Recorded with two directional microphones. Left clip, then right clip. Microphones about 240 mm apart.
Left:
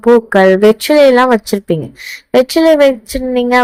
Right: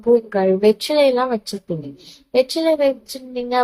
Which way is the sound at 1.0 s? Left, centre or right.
Left.